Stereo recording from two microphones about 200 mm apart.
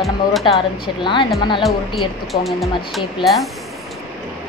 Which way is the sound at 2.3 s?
Centre (ahead or behind).